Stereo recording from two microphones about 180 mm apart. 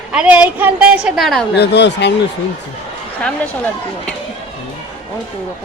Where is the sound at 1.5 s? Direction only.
70° left (ahead or behind).